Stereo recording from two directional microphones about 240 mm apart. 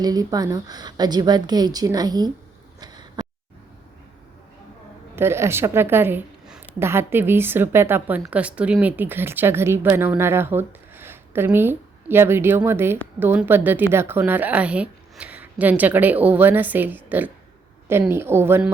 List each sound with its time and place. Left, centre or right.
0.0 s a woman's voice: centre
2.8 s a sound: centre
5.1 s a woman's voice: centre